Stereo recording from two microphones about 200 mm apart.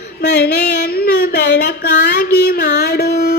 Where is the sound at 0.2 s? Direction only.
55° left (ahead or behind).